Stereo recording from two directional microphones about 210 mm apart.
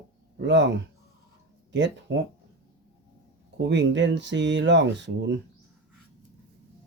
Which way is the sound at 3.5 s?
55° right (ahead or behind).